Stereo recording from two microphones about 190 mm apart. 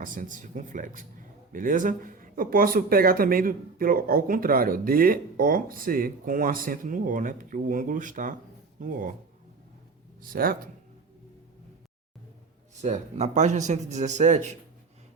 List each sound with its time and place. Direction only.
0.0 s speech: 45° right (ahead or behind)
10.2 s speech: 50° right (ahead or behind)
12.7 s a man's voice: 35° right (ahead or behind)